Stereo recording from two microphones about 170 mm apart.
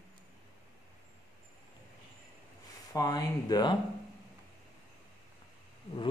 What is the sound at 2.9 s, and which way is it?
Speech, 20° left (ahead or behind).